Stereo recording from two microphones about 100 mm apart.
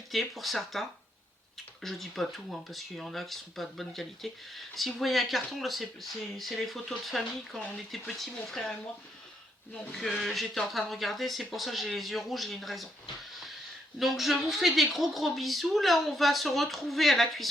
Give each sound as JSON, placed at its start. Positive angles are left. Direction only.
{"t": 0.1, "sound": "speech", "side_deg": 0}
{"t": 9.9, "sound": "speech", "side_deg": 5}
{"t": 14.0, "sound": "speech", "side_deg": 0}